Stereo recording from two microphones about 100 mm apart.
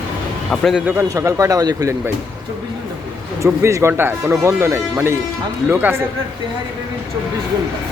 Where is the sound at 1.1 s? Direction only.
30° right (ahead or behind).